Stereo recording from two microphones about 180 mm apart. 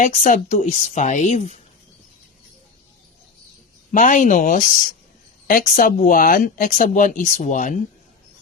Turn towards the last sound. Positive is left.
turn(degrees=45)  # may be behind; listen again after turning